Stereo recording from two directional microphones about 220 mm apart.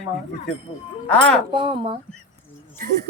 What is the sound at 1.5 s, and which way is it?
Speech, 20° right (ahead or behind).